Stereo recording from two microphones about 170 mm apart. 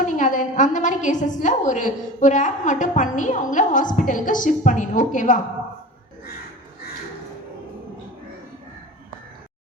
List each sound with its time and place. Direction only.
0.0 s a woman's voice: 50° left (ahead or behind)